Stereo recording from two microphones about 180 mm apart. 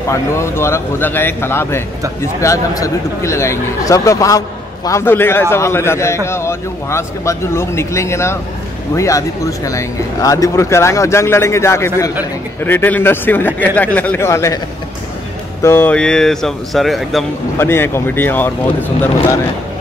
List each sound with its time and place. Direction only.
0.1 s speech: 15° left (ahead or behind)
15.6 s speech: 10° left (ahead or behind)
17.6 s speech: 15° left (ahead or behind)